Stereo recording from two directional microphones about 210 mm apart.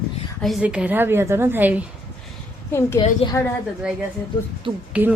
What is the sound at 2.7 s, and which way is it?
Speech, 10° left (ahead or behind).